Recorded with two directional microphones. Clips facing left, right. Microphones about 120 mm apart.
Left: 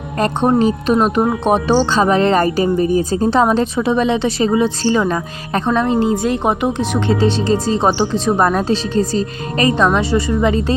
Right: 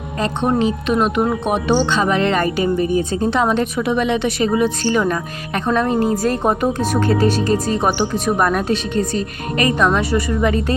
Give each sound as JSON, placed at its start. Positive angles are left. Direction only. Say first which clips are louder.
{"t": 0.4, "sound": "a woman's voice", "louder": "left 3 dB", "side_deg": 35}